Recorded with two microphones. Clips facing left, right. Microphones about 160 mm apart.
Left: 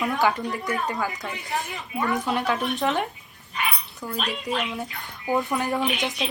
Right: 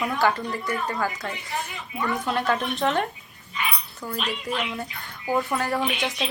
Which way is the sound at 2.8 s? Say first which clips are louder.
Right 1 dB; 5° left (ahead or behind).